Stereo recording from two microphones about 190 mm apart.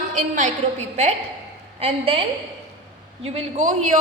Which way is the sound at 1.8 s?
30° right (ahead or behind).